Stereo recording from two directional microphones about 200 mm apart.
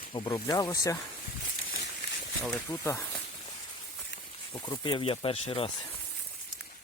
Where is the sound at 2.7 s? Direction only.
20° left (ahead or behind).